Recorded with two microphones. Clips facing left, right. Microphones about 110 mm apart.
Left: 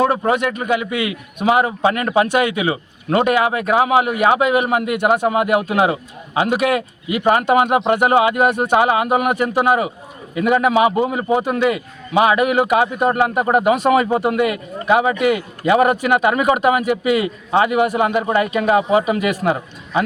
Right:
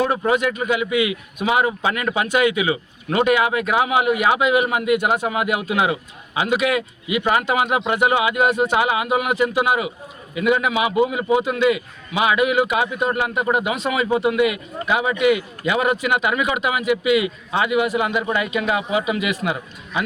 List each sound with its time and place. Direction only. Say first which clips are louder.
0.0 s a man's voice: left 2 dB; 45° left (ahead or behind)